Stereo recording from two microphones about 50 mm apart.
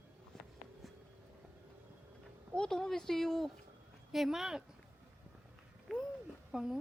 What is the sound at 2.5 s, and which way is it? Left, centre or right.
Speech, centre.